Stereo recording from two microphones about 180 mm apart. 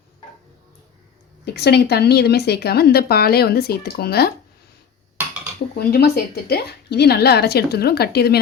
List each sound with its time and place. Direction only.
1.5 s speech: 65° left (ahead or behind)
5.5 s speech: 60° left (ahead or behind)